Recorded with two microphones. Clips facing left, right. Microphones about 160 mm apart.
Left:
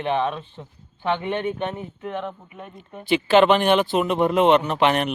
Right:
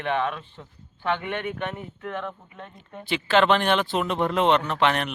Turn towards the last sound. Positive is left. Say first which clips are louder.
# left 3 dB
turn(degrees=15)  # may be behind; listen again after turning